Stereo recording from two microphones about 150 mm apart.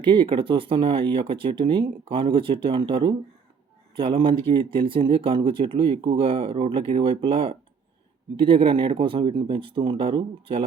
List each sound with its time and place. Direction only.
0.0 s speech: 35° right (ahead or behind)